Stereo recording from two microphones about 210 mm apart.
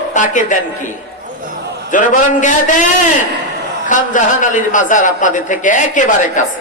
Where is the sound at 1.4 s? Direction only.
45° right (ahead or behind).